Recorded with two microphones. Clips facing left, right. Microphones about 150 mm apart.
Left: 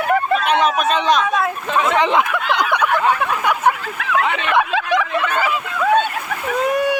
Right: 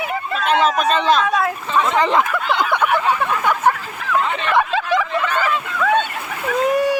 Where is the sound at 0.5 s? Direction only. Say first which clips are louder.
Right 3 dB; centre (ahead or behind).